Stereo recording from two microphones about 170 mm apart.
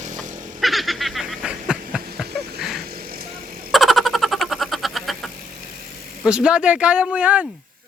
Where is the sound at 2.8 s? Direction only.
60° right (ahead or behind).